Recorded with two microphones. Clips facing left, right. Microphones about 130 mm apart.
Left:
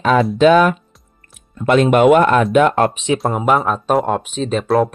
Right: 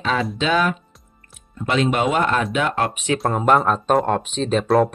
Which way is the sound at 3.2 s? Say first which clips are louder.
Even; 5° left (ahead or behind).